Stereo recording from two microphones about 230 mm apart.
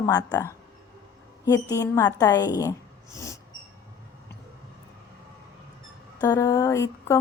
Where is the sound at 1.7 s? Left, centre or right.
Centre.